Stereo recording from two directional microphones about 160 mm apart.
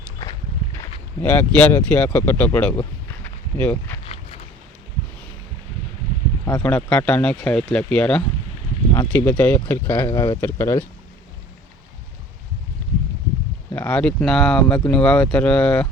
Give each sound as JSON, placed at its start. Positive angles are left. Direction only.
{"t": 0.8, "sound": "speech", "side_deg": 10}
{"t": 4.0, "sound": "boat", "side_deg": 40}
{"t": 6.4, "sound": "speech", "side_deg": 15}
{"t": 13.7, "sound": "speech", "side_deg": 10}